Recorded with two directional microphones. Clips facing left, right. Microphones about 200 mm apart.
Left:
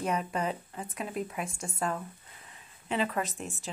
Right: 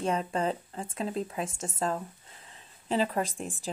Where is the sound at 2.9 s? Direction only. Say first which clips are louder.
Right 3 dB; 30° right (ahead or behind).